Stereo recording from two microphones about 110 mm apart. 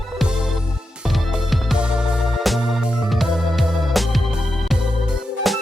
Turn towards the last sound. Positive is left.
turn(degrees=-5)  # may be behind; listen again after turning